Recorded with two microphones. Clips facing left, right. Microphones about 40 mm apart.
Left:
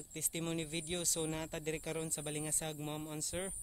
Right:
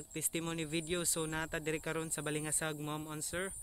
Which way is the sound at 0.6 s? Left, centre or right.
Centre.